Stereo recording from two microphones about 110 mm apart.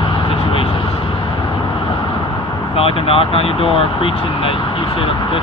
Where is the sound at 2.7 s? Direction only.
55° left (ahead or behind).